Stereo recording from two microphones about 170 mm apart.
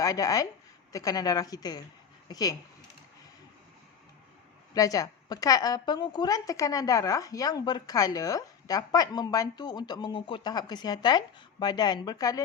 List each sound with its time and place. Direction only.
0.0 s a woman's voice: 20° left (ahead or behind)
4.7 s a woman's voice: 20° left (ahead or behind)